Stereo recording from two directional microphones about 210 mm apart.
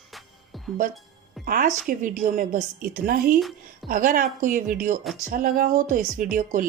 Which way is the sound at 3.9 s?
40° right (ahead or behind).